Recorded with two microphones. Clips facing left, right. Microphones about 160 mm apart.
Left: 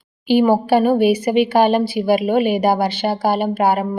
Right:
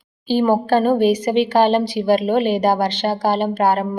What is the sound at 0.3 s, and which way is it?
Speech, 10° left (ahead or behind).